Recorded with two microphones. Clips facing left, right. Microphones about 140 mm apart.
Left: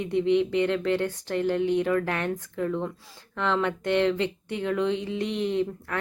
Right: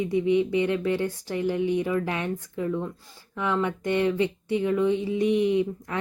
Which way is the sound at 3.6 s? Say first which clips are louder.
Left 1 dB; 65° left (ahead or behind).